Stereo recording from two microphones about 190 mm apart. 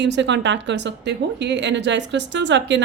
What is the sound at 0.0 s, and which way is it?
A woman's voice, 70° right (ahead or behind).